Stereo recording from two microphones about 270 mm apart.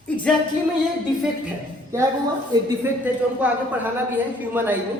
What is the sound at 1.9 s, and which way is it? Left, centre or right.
A man's voice, centre.